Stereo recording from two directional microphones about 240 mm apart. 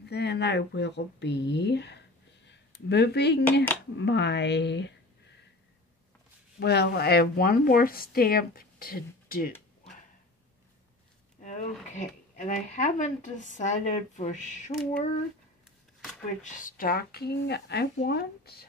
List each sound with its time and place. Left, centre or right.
0.1 s speech: left
6.6 s speech: left
11.4 s speech: left
16.4 s speech: left